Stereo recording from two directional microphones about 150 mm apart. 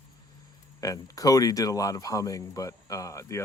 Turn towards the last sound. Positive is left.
turn(degrees=20)  # may be behind; listen again after turning